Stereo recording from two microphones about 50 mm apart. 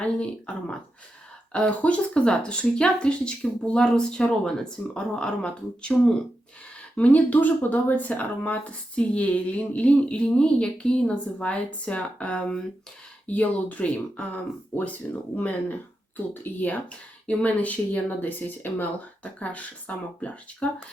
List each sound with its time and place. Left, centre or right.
0.0 s speech: left
6.9 s speech: left
13.2 s speech: left
19.2 s speech: left